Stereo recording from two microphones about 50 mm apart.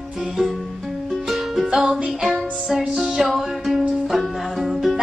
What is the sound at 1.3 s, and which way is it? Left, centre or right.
Music, centre.